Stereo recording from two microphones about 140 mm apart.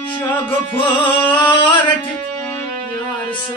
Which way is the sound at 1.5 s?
35° left (ahead or behind).